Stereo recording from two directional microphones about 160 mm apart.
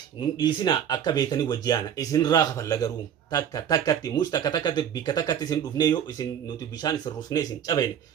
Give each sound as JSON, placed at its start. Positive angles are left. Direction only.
{"t": 0.2, "sound": "speech", "side_deg": 30}